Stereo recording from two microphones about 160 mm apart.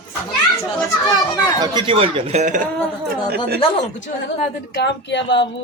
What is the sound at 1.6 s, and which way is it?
Speech, 30° right (ahead or behind).